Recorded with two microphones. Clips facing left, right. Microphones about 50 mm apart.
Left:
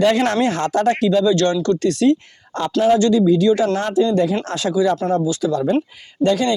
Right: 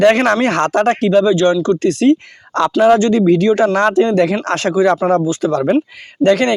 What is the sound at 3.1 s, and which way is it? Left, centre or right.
Speech, right.